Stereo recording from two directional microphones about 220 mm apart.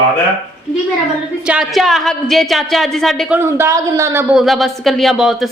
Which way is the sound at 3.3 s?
10° right (ahead or behind).